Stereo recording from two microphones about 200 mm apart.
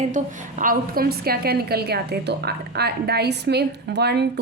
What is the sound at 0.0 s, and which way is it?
A woman's voice, 40° right (ahead or behind).